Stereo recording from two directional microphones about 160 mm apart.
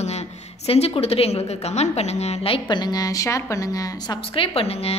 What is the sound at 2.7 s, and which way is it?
A woman's voice, 25° left (ahead or behind).